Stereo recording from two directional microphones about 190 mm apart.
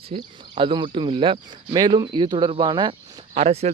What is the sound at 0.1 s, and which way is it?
Speech, 30° right (ahead or behind).